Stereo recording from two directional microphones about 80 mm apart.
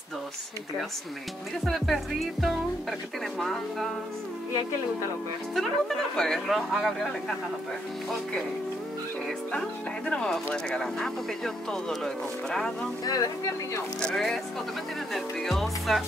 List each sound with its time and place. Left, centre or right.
1.6 s speech: centre
5.5 s speech: centre
9.5 s speech: centre
13.0 s speech: left
14.0 s speech: centre